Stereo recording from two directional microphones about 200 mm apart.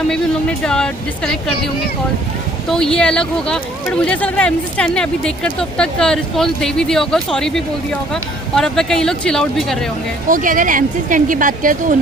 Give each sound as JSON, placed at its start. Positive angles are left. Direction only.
{"t": 0.1, "sound": "speech", "side_deg": 5}
{"t": 10.2, "sound": "speech", "side_deg": -40}